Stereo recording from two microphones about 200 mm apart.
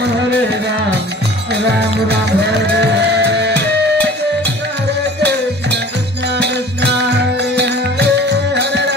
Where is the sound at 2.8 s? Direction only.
55° right (ahead or behind).